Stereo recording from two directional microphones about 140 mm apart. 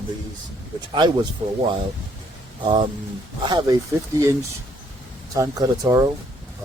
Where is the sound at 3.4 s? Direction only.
30° right (ahead or behind).